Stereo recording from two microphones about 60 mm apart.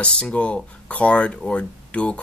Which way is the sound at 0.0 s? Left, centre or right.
Centre.